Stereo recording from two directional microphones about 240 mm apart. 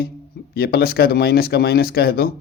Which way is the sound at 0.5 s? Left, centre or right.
Left.